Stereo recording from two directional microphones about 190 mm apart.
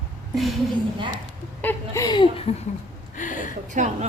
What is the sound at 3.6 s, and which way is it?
Speech, 40° right (ahead or behind).